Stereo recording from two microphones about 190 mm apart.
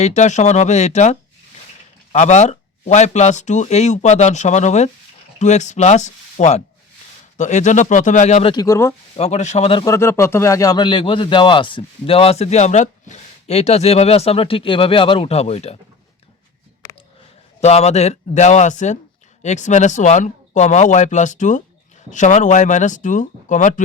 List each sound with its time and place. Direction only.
0.0 s speech: 40° left (ahead or behind)
8.5 s speech: 15° left (ahead or behind)
9.1 s speech: 35° left (ahead or behind)
9.8 s speech: 15° left (ahead or behind); by 15.8 s 35° left (ahead or behind)
17.6 s speech: 35° left (ahead or behind)